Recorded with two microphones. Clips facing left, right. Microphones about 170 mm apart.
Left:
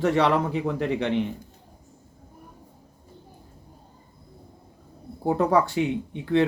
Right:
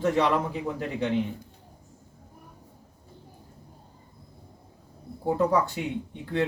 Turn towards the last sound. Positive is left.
turn(degrees=80)